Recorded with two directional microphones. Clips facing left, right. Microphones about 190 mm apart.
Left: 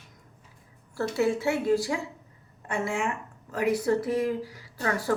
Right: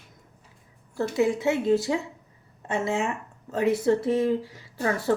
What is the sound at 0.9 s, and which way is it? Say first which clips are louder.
Speech: right 2 dB; 15° right (ahead or behind).